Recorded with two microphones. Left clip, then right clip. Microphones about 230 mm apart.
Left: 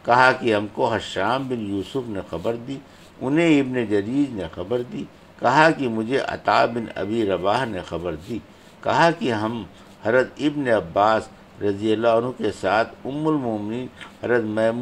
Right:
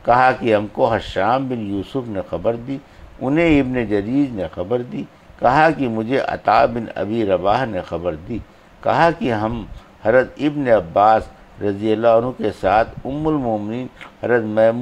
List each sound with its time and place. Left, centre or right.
0.0 s speech: right